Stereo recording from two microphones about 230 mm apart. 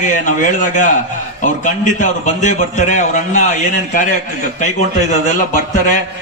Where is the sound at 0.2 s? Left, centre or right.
Left.